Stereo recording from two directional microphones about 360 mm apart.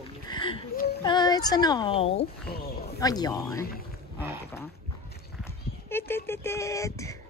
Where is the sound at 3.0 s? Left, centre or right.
Centre.